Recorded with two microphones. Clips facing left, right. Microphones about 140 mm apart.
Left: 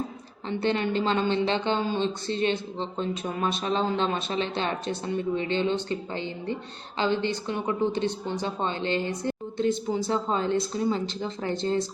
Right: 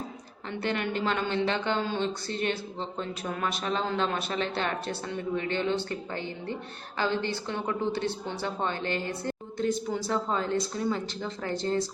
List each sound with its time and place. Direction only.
0.6 s speech: 25° left (ahead or behind)